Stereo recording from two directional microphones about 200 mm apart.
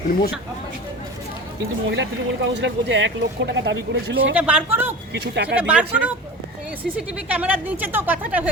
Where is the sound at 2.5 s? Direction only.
65° right (ahead or behind).